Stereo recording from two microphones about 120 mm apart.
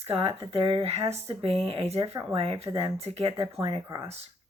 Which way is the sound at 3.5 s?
35° right (ahead or behind).